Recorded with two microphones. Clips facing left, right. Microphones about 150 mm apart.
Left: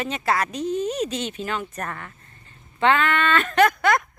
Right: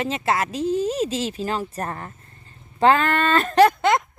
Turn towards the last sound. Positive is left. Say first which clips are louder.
# right 1 dB
turn(degrees=-20)  # may be behind; listen again after turning